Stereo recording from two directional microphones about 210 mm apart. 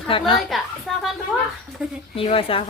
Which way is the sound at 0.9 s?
Centre (ahead or behind).